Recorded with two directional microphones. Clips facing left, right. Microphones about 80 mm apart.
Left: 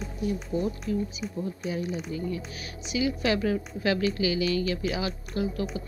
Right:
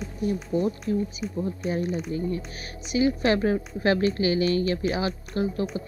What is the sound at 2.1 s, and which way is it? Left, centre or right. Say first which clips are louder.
Speech: right 3 dB; right.